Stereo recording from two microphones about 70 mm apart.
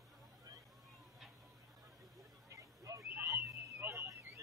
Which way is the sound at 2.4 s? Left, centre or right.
Right.